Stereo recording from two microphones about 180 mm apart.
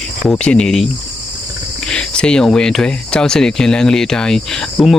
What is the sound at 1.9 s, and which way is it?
Speech, 5° left (ahead or behind).